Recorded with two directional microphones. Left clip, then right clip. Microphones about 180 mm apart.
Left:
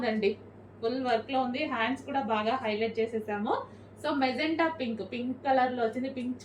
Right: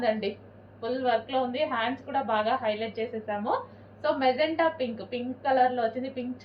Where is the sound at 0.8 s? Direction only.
15° left (ahead or behind).